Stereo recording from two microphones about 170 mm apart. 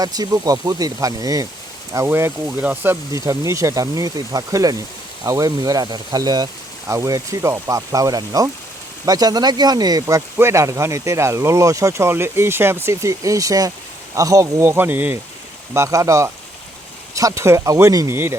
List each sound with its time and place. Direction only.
0.0 s speech: 20° right (ahead or behind)